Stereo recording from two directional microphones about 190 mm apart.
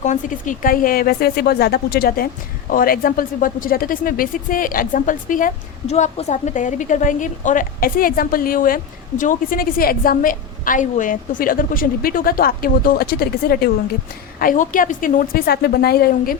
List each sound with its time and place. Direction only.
0.0 s speech: 40° left (ahead or behind)